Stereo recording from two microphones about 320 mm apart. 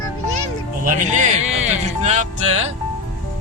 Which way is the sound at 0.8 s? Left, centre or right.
Right.